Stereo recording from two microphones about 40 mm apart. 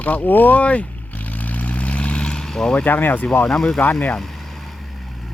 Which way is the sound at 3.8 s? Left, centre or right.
Left.